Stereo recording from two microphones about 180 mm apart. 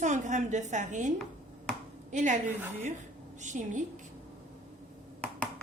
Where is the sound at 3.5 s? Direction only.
45° right (ahead or behind).